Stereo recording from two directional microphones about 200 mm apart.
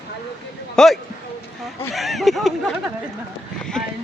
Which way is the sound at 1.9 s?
Centre (ahead or behind).